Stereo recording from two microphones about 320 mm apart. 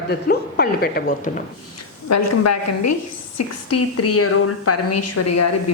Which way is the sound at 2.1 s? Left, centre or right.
Left.